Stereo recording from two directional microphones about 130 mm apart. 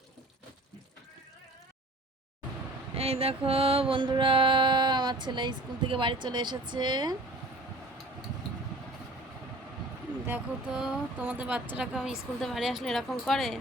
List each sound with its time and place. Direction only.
2.9 s mantra: 50° right (ahead or behind); by 7.2 s 35° right (ahead or behind)
10.2 s a woman's voice: 10° right (ahead or behind)